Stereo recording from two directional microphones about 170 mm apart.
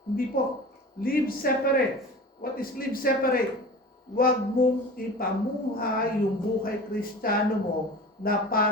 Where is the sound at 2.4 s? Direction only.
60° left (ahead or behind).